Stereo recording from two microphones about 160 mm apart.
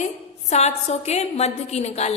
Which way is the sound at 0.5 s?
45° left (ahead or behind).